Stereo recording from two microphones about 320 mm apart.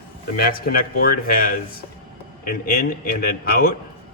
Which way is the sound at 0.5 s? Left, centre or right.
Left.